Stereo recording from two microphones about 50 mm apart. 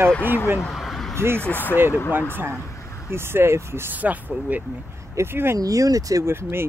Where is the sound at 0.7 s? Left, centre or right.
Centre.